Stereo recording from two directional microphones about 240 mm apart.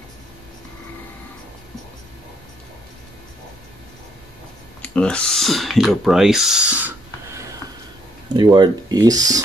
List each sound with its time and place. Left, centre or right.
4.8 s speech: centre
8.4 s speech: centre